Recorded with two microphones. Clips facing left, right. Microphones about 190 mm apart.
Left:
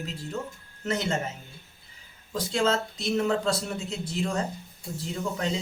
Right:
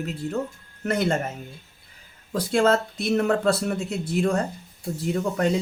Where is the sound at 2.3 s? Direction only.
60° right (ahead or behind).